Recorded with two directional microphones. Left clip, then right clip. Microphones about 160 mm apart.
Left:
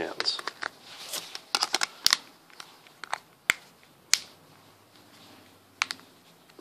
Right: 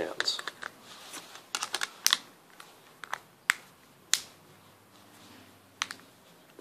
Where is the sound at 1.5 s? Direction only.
35° left (ahead or behind).